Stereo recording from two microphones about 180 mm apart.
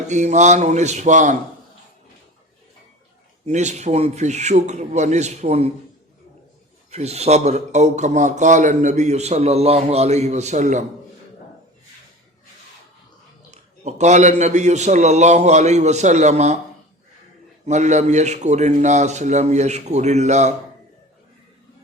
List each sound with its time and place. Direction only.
0.1 s a man's voice: 40° right (ahead or behind)
3.4 s a man's voice: 40° right (ahead or behind)
6.9 s a man's voice: 35° right (ahead or behind)
13.5 s a man's voice: 40° right (ahead or behind)
17.7 s a man's voice: 40° right (ahead or behind)